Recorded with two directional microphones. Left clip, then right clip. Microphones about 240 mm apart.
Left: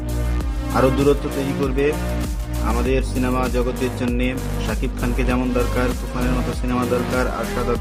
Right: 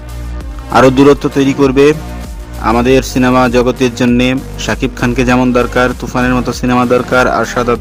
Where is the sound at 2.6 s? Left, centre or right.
Right.